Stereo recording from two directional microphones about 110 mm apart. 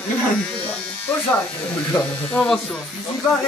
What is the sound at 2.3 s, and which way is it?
Speech, 10° left (ahead or behind).